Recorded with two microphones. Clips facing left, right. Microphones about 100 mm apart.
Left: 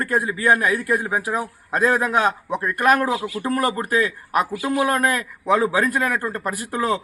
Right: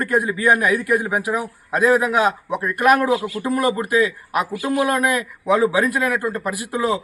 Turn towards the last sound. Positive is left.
turn(degrees=-10)  # may be behind; listen again after turning